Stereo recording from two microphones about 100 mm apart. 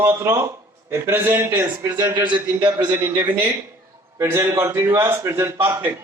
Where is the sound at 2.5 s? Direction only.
45° right (ahead or behind).